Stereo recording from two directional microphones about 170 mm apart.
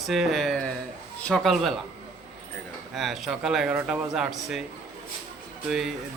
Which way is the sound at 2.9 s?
Centre (ahead or behind).